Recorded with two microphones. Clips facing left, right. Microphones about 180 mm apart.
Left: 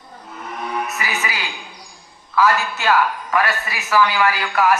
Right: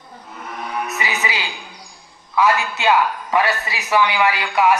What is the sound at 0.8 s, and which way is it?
Music, 20° right (ahead or behind).